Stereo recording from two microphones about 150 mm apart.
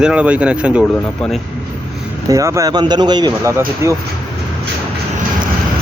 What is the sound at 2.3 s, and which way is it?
Speech, 20° right (ahead or behind).